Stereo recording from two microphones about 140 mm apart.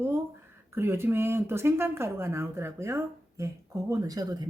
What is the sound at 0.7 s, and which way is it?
Speech, 15° right (ahead or behind).